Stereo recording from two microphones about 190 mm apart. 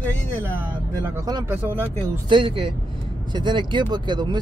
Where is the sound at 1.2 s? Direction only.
15° right (ahead or behind).